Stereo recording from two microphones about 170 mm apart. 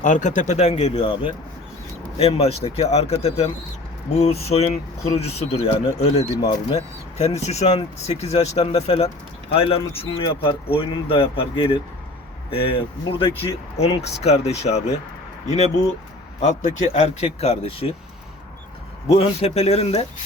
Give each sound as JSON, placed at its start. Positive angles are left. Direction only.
{"t": 0.0, "sound": "speech", "side_deg": 45}
{"t": 16.4, "sound": "speech", "side_deg": 40}
{"t": 19.0, "sound": "speech", "side_deg": 35}